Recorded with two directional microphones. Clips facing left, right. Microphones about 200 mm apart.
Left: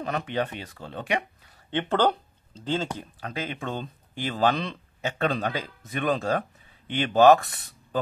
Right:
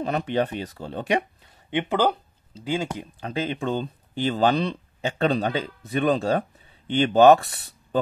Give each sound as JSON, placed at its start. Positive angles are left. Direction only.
{"t": 0.0, "sound": "speech", "side_deg": -30}
{"t": 1.7, "sound": "speech", "side_deg": -10}
{"t": 3.2, "sound": "speech", "side_deg": -30}